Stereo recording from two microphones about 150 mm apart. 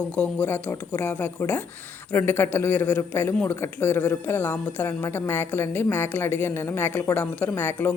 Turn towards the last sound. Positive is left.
turn(degrees=15)  # may be behind; listen again after turning